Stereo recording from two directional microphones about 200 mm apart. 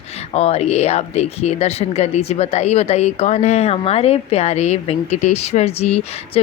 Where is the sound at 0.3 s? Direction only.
30° left (ahead or behind).